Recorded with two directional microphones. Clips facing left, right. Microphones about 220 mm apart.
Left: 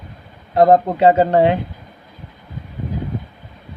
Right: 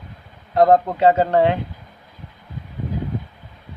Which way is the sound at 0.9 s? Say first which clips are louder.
Left 3 dB; 15° left (ahead or behind).